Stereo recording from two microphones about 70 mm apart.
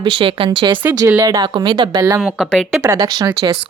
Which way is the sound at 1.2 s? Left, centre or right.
Right.